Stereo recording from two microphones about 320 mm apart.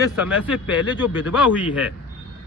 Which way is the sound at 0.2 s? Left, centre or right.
Centre.